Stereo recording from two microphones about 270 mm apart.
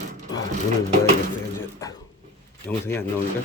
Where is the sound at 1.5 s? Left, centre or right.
Centre.